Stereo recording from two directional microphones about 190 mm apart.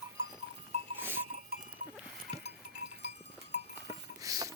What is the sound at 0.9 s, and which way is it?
Goat, 10° right (ahead or behind).